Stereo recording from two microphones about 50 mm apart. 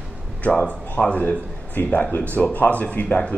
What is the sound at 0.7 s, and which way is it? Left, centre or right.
Speech, left.